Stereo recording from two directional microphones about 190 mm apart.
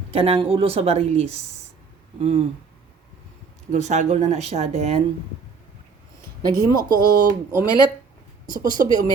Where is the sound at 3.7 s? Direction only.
40° right (ahead or behind).